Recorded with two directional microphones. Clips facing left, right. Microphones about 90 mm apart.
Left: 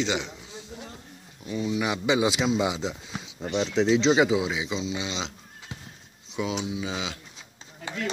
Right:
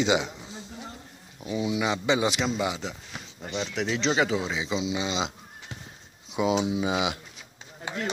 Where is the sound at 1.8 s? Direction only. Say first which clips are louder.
Left 2 dB; 10° left (ahead or behind).